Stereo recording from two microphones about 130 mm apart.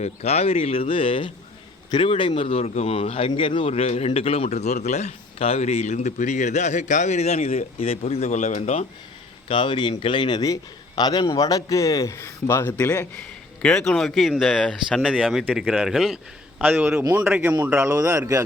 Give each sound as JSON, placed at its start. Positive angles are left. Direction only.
{"t": 0.0, "sound": "a man's voice", "side_deg": 55}
{"t": 9.5, "sound": "a man's voice", "side_deg": 40}
{"t": 17.0, "sound": "speech", "side_deg": -25}
{"t": 17.2, "sound": "speech", "side_deg": -15}